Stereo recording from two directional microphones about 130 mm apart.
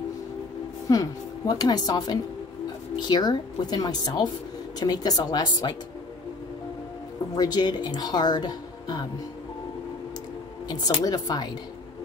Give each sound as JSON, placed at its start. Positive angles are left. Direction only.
{"t": 0.8, "sound": "speech", "side_deg": 30}
{"t": 7.3, "sound": "speech", "side_deg": 30}
{"t": 10.7, "sound": "speech", "side_deg": 30}